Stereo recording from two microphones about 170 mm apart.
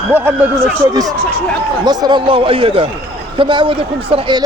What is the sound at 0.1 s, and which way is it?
Speech, 15° right (ahead or behind).